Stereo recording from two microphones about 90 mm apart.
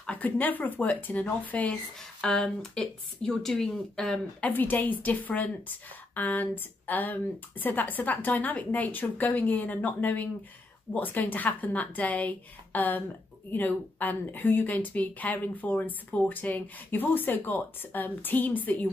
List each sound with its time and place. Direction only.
0.0 s a woman's voice: 20° left (ahead or behind)
2.2 s a woman's voice: 5° left (ahead or behind)